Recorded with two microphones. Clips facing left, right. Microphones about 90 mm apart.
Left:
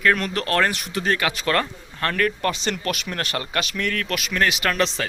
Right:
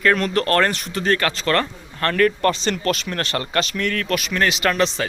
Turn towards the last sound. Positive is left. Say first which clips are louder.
# right 3 dB
turn(degrees=-5)  # may be behind; listen again after turning